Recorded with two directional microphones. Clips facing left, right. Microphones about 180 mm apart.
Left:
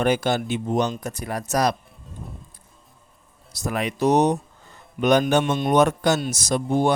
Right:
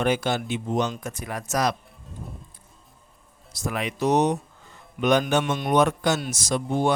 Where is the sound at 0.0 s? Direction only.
40° left (ahead or behind).